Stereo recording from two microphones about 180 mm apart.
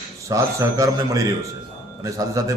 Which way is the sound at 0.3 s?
20° right (ahead or behind).